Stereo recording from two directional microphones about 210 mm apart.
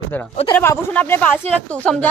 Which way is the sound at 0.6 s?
10° left (ahead or behind).